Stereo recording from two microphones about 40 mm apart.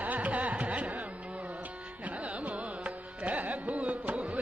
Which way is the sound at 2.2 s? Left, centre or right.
Right.